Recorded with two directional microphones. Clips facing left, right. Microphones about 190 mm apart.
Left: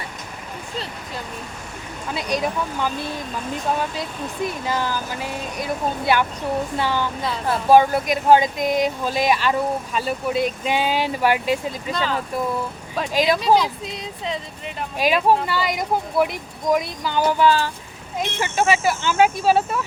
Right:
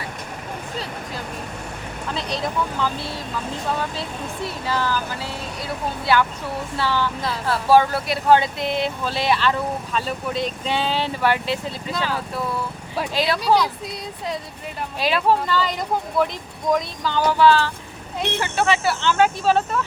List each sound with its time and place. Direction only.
2.1 s speech: 10° left (ahead or behind)
4.4 s speech: 15° left (ahead or behind)
11.9 s speech: 5° right (ahead or behind)
13.1 s speech: 15° left (ahead or behind)
14.9 s speech: 15° left (ahead or behind)